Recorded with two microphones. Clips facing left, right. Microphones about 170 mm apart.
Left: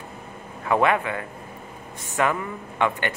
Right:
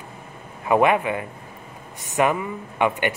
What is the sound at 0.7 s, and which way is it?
Speech, 15° right (ahead or behind).